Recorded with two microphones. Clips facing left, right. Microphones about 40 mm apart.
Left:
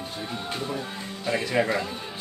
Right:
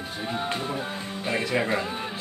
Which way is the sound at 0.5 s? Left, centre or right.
Centre.